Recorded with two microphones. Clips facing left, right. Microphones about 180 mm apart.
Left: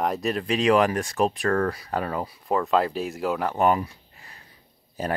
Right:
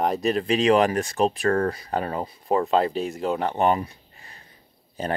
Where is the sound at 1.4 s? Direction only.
20° right (ahead or behind).